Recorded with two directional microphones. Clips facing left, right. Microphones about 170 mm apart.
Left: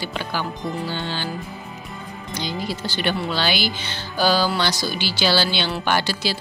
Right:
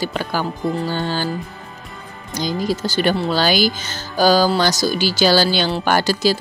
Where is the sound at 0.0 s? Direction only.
45° right (ahead or behind).